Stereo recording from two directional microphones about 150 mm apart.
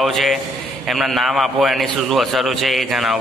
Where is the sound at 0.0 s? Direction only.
Centre (ahead or behind).